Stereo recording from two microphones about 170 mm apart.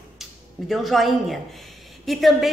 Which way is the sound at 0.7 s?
Centre (ahead or behind).